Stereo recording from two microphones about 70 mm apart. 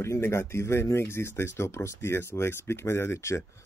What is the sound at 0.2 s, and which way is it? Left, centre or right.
Speech, left.